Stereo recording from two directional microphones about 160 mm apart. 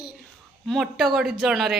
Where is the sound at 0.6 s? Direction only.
Centre (ahead or behind).